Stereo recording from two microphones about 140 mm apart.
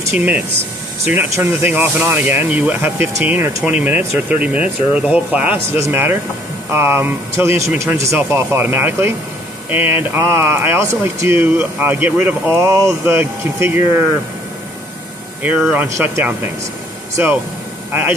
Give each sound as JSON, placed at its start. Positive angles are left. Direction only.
{"t": 0.1, "sound": "speech", "side_deg": -10}
{"t": 15.7, "sound": "speech", "side_deg": -15}